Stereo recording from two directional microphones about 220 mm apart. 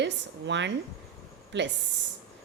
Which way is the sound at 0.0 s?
55° right (ahead or behind).